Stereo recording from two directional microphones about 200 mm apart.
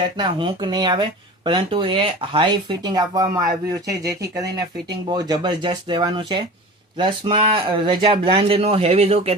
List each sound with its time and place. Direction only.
0.2 s speech: 25° right (ahead or behind)